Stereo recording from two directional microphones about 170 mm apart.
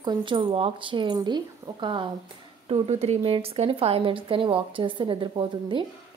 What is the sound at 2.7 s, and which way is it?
Speech, 40° right (ahead or behind).